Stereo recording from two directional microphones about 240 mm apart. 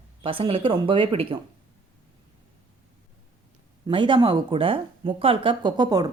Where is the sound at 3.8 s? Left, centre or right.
Centre.